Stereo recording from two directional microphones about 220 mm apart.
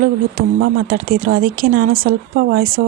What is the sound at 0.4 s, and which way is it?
Speech, 45° right (ahead or behind).